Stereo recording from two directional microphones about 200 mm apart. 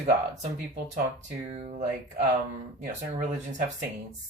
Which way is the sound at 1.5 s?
30° right (ahead or behind).